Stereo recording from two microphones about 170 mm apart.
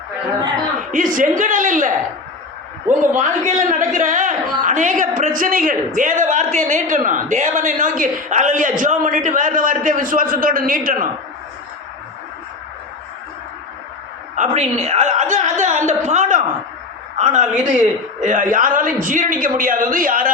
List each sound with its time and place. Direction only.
0.9 s a man's voice: 50° right (ahead or behind)
3.0 s a man's voice: 45° right (ahead or behind)
14.3 s a man's voice: 45° right (ahead or behind)